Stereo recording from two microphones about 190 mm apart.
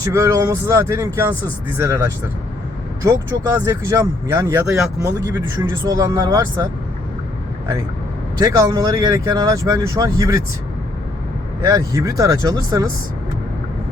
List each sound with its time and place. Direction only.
0.0 s speech: 15° right (ahead or behind)
8.4 s speech: 15° right (ahead or behind)
11.7 s speech: 20° right (ahead or behind)